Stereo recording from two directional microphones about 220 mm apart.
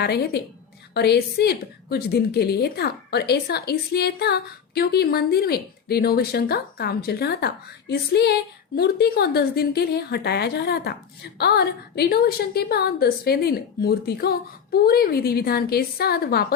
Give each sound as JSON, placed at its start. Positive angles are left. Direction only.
{"t": 0.9, "sound": "a woman's voice", "side_deg": 45}